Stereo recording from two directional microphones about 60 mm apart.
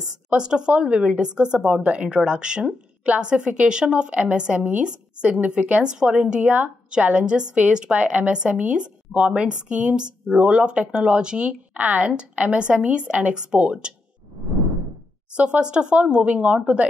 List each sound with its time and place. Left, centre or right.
0.0 s a woman's voice: centre
15.3 s speech: centre